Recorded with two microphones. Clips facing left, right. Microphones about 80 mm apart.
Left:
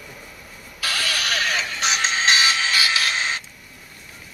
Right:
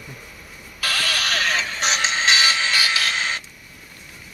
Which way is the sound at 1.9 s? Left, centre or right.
Centre.